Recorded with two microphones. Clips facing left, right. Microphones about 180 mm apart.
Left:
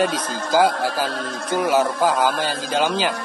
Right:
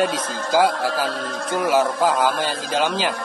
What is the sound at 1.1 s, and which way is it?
Speech, 55° left (ahead or behind).